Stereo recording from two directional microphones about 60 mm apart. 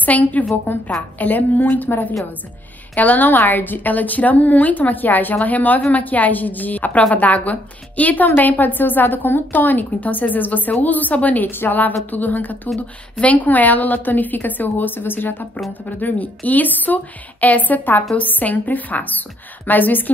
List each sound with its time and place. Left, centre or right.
0.0 s a woman's voice: left
12.6 s speech: centre
13.2 s a woman's voice: left